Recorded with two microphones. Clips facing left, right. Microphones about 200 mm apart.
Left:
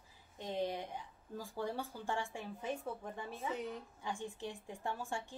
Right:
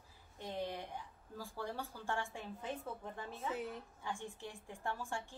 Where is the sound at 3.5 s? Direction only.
5° right (ahead or behind).